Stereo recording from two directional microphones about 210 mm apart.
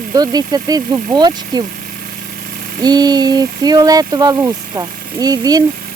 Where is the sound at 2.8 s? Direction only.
20° right (ahead or behind).